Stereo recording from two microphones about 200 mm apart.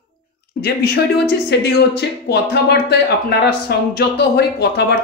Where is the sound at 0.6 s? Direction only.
50° left (ahead or behind).